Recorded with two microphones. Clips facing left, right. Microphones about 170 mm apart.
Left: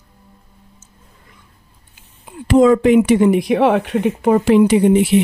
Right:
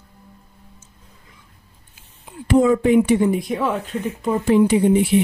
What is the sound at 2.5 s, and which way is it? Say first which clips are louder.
Speech: left 4 dB; 90° left.